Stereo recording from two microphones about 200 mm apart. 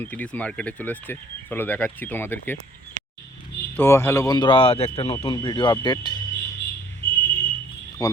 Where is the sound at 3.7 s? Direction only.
10° left (ahead or behind).